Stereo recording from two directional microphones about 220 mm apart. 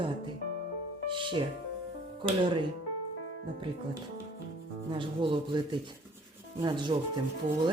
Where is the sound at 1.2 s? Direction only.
20° right (ahead or behind).